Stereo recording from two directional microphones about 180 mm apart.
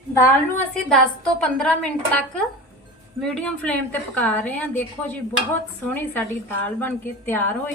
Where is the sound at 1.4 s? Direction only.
5° left (ahead or behind).